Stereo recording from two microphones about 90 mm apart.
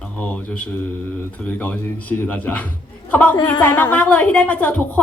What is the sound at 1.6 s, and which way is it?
A woman's voice, 15° left (ahead or behind).